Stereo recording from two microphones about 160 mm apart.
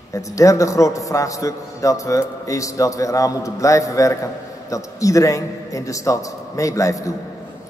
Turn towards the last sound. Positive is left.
turn(degrees=20)  # may be behind; listen again after turning